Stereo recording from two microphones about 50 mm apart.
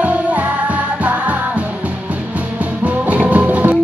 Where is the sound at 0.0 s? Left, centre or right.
Right.